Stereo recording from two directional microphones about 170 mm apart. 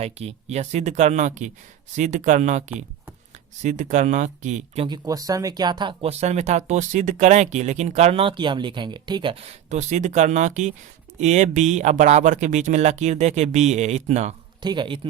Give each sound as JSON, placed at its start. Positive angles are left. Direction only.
{"t": 0.0, "sound": "speech", "side_deg": -40}
{"t": 4.9, "sound": "speech", "side_deg": -20}
{"t": 14.6, "sound": "speech", "side_deg": -25}